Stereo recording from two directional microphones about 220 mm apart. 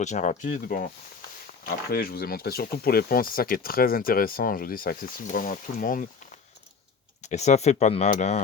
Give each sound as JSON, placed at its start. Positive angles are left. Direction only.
{"t": 0.0, "sound": "speech", "side_deg": 35}
{"t": 7.2, "sound": "speech", "side_deg": 30}